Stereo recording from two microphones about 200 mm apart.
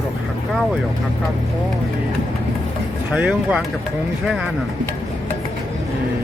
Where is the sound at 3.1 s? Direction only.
5° right (ahead or behind).